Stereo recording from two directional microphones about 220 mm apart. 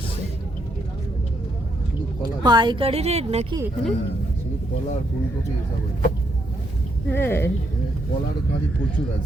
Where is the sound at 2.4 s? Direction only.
20° right (ahead or behind).